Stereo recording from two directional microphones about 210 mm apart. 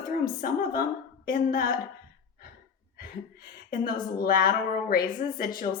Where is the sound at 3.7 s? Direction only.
45° left (ahead or behind).